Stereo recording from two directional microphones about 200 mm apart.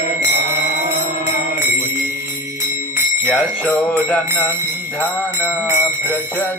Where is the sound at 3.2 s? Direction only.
5° left (ahead or behind).